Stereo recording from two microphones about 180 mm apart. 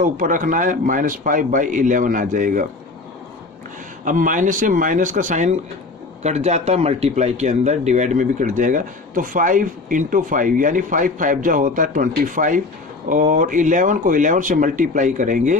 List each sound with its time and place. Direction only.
0.0 s speech: 50° right (ahead or behind)
4.0 s speech: 45° right (ahead or behind)